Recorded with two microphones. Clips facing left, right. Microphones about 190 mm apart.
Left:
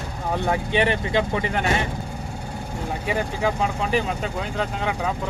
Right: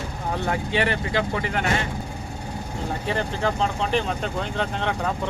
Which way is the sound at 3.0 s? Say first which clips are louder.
Left 2 dB; 10° left (ahead or behind).